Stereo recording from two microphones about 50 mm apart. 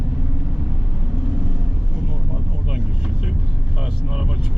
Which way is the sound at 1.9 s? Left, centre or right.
Centre.